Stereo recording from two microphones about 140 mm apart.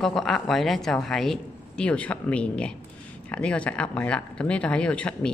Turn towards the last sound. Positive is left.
turn(degrees=5)  # may be behind; listen again after turning